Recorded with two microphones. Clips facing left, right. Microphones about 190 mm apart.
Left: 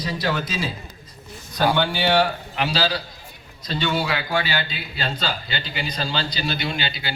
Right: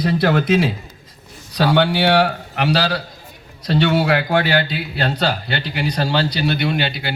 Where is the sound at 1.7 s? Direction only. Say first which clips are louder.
Right 7 dB; 70° right (ahead or behind).